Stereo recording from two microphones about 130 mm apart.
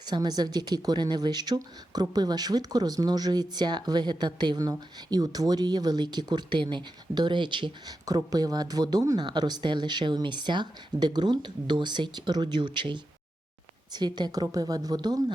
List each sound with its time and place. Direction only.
0.0 s speech: 30° right (ahead or behind)